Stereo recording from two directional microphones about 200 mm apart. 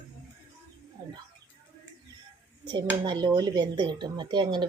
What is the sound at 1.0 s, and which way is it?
Mouse, 20° right (ahead or behind).